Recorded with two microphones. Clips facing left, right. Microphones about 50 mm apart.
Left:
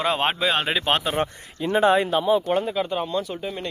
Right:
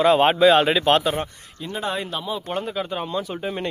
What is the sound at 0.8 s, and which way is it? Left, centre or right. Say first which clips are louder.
Speech: right 3 dB; centre.